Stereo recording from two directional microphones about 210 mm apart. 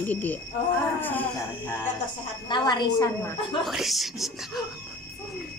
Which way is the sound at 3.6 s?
Centre (ahead or behind).